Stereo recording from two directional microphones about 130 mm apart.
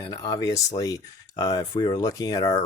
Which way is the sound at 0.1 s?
30° left (ahead or behind).